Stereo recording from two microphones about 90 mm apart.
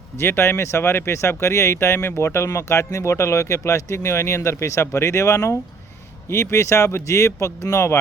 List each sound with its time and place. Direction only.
0.2 s speech: 30° left (ahead or behind)